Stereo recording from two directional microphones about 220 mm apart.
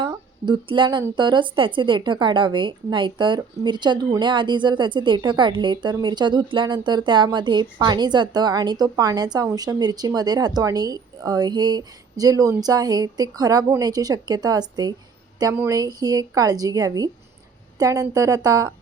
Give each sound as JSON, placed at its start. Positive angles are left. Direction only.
{"t": 0.0, "sound": "a woman's voice", "side_deg": -20}